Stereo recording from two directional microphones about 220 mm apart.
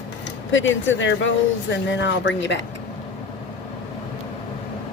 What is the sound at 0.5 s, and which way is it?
Speech, 55° left (ahead or behind).